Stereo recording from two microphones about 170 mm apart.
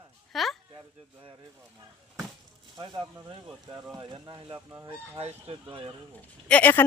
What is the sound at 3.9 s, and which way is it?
Speech, 25° right (ahead or behind).